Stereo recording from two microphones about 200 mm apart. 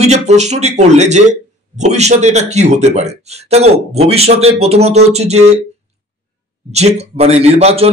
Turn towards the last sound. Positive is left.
turn(degrees=-30)  # may be behind; listen again after turning